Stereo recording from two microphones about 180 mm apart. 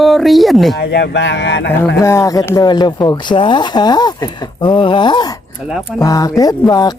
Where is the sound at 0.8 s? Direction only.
65° left (ahead or behind).